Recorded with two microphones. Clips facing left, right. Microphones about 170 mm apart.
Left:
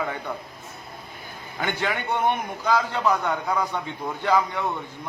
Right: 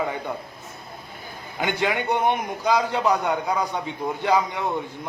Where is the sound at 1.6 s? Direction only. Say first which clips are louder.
Right 3 dB; 15° right (ahead or behind).